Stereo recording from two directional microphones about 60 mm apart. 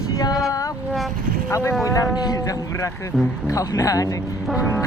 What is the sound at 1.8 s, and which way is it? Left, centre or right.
Speech, left.